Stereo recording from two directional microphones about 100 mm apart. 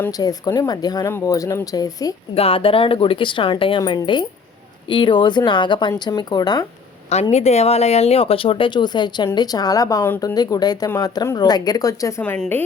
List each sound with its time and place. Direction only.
0.1 s speech: 40° left (ahead or behind)
2.3 s speech: 75° left (ahead or behind); by 3.8 s 60° left (ahead or behind)
3.8 s speech: 45° left (ahead or behind)
7.1 s speech: 90° left; by 12.2 s 35° left (ahead or behind)
12.2 s a woman's voice: 15° left (ahead or behind)